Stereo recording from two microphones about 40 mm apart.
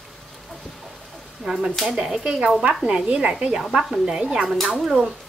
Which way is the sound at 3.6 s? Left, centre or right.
Centre.